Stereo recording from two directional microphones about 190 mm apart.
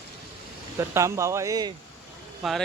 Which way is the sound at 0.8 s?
15° right (ahead or behind).